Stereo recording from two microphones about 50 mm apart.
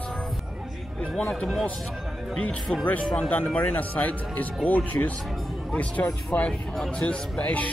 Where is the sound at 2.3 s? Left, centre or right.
Left.